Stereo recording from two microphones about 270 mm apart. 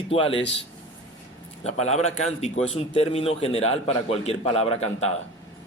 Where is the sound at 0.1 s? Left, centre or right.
Left.